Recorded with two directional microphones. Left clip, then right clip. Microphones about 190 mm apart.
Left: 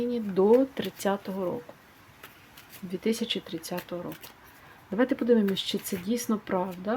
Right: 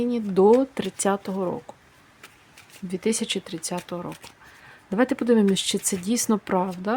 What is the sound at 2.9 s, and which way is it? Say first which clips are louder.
Speech: right 4 dB; 25° right (ahead or behind).